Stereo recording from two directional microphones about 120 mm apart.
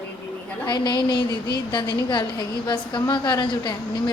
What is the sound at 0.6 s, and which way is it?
A woman's voice, 40° left (ahead or behind).